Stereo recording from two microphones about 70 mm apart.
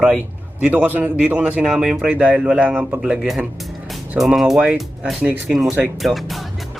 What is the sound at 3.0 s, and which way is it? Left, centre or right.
Speech, centre.